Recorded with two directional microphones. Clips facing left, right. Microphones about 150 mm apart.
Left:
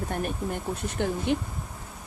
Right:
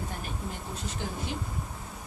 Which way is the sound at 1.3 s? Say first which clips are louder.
Left 9 dB; 65° left (ahead or behind).